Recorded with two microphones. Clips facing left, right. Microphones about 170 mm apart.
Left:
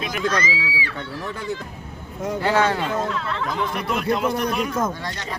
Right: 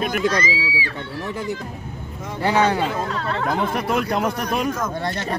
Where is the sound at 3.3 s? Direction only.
55° right (ahead or behind).